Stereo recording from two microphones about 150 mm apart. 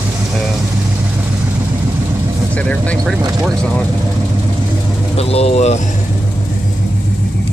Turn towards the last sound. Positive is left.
turn(degrees=45)  # may be behind; listen again after turning